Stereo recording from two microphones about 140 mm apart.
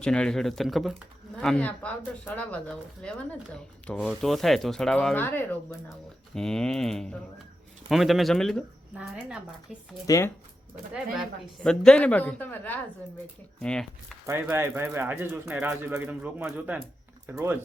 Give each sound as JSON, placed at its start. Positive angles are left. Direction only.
{"t": 0.0, "sound": "speech", "side_deg": 5}
{"t": 10.1, "sound": "speech", "side_deg": 20}
{"t": 10.9, "sound": "speech", "side_deg": 0}
{"t": 14.3, "sound": "speech", "side_deg": -15}